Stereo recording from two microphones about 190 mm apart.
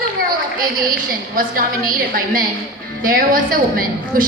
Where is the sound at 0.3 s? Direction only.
50° right (ahead or behind).